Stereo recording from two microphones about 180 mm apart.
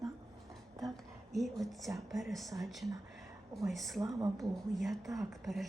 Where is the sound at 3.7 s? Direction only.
Centre (ahead or behind).